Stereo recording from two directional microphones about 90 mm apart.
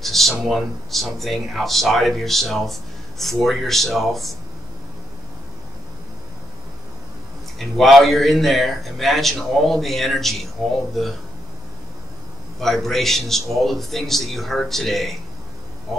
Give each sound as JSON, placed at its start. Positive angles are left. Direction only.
{"t": 0.0, "sound": "speech", "side_deg": 0}
{"t": 7.5, "sound": "speech", "side_deg": 0}
{"t": 12.5, "sound": "speech", "side_deg": 0}